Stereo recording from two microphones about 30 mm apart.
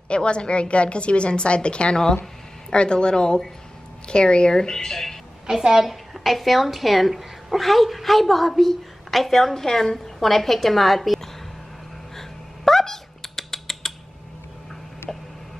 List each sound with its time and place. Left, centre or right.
0.1 s a woman's voice: left; by 5.2 s centre
5.7 s a woman's voice: centre
6.1 s a woman's voice: centre
12.2 s typing: centre
15.1 s a sound: centre